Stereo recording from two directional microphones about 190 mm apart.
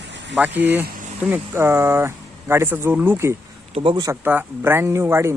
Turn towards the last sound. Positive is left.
turn(degrees=-15)  # may be behind; listen again after turning